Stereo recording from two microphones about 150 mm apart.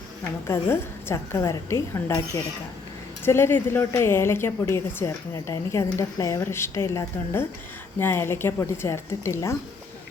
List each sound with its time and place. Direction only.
0.4 s a woman's voice: 15° left (ahead or behind)